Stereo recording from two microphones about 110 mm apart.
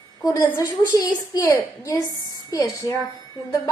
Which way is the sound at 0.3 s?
35° left (ahead or behind).